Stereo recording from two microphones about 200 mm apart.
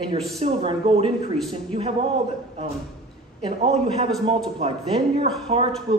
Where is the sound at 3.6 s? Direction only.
30° right (ahead or behind).